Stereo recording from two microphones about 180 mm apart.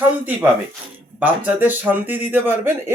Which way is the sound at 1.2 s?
10° right (ahead or behind).